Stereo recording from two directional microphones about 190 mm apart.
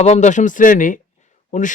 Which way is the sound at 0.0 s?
40° left (ahead or behind).